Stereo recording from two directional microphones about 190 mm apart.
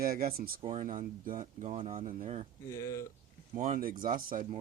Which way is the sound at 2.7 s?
15° left (ahead or behind).